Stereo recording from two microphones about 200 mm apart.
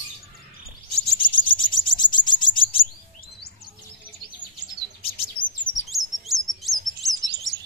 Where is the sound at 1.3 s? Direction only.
25° left (ahead or behind).